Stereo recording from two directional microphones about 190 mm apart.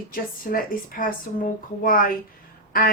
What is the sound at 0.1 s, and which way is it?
Speech, 50° left (ahead or behind).